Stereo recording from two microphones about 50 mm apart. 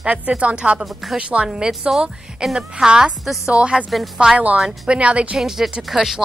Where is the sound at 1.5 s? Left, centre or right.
Centre.